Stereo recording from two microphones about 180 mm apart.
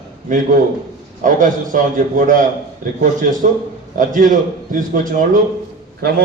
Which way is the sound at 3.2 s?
50° right (ahead or behind).